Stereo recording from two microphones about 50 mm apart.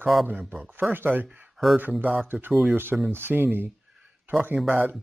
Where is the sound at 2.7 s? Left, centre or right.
Right.